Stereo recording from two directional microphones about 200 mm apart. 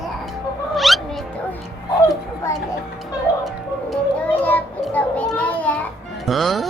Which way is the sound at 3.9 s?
10° left (ahead or behind).